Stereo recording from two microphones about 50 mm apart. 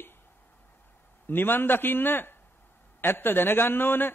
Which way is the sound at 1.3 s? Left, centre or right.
Left.